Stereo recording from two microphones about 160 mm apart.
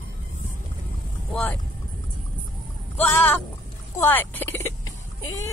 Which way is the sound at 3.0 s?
10° left (ahead or behind).